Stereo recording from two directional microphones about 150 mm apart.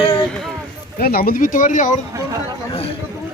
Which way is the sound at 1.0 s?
85° left.